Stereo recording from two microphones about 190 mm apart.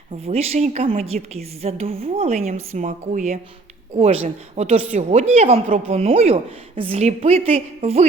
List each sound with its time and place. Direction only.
0.3 s speech: 35° right (ahead or behind)